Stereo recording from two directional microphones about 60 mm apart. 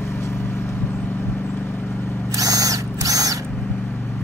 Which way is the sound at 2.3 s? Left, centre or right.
Right.